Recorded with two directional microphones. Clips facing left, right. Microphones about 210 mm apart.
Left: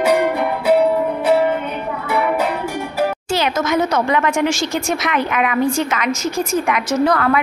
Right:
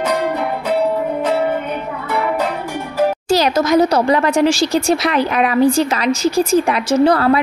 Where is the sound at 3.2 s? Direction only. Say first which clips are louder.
Right 4 dB; 40° right (ahead or behind).